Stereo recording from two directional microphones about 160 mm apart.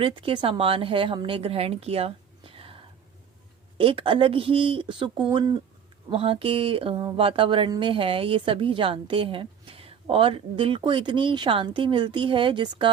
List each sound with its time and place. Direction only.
0.0 s a woman's voice: 30° right (ahead or behind)